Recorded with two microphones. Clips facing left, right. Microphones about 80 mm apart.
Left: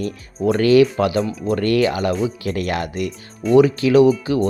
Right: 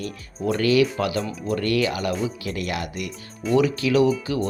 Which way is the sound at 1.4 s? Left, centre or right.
Left.